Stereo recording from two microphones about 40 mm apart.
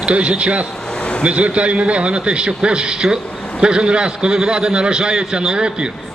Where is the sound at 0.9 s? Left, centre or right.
Left.